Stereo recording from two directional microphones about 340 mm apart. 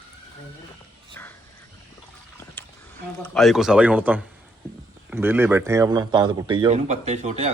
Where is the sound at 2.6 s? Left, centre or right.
Centre.